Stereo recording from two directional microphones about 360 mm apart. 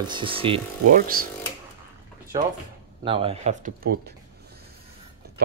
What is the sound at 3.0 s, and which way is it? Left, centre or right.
Speech, centre.